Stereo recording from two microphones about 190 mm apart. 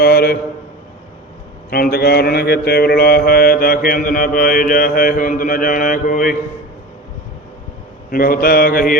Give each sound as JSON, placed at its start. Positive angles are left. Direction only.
{"t": 0.0, "sound": "a sound", "side_deg": 55}
{"t": 1.7, "sound": "mantra", "side_deg": 55}
{"t": 8.1, "sound": "mantra", "side_deg": 50}